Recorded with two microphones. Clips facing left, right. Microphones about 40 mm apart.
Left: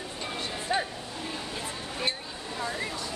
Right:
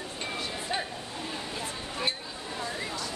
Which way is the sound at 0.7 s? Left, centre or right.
Centre.